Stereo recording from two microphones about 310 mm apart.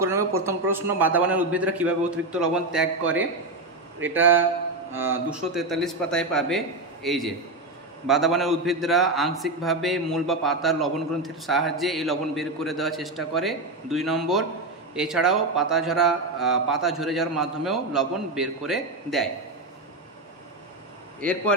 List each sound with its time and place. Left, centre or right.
0.3 s a man's voice: centre
21.2 s a man's voice: centre